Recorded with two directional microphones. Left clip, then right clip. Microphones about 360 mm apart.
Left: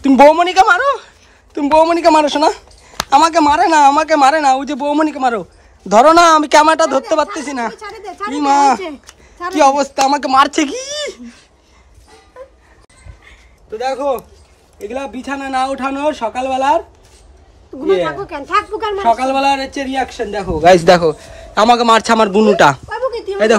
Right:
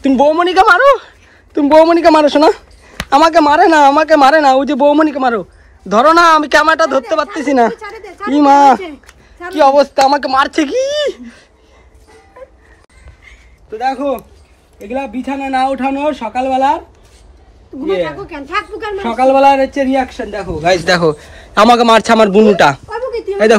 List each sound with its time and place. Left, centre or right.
0.3 s a woman's voice: centre
7.9 s a sound: centre
8.3 s a man's voice: centre
13.8 s a man's voice: centre
17.8 s speech: left
18.4 s speech: centre
19.1 s a man's voice: centre
20.1 s speech: left
20.8 s a man's voice: centre